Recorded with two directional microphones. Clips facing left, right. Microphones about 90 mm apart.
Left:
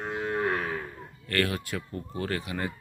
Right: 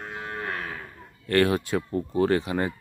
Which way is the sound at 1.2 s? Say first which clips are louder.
Right 7 dB; 25° right (ahead or behind).